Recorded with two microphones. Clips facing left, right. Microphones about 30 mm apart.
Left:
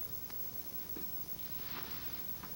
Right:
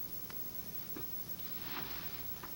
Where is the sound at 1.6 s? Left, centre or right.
Centre.